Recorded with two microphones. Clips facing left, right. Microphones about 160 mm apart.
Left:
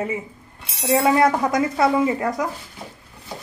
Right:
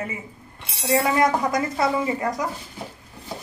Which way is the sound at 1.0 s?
20° left (ahead or behind).